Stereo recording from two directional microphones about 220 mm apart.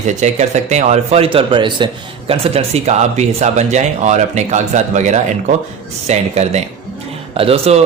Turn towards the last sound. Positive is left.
turn(degrees=-25)  # may be behind; listen again after turning